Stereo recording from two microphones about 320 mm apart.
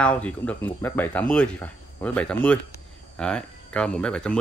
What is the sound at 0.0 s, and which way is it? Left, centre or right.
Speech, centre.